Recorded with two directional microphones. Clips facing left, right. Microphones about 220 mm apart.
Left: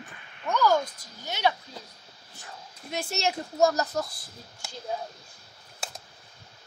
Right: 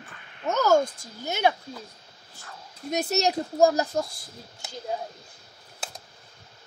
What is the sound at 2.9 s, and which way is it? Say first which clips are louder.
Speech: right 5 dB; 40° right (ahead or behind).